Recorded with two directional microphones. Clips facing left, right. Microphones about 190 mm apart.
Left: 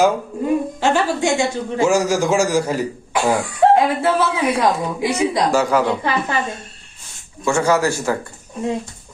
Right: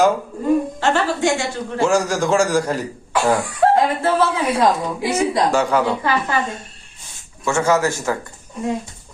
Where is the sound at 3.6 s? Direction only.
20° left (ahead or behind).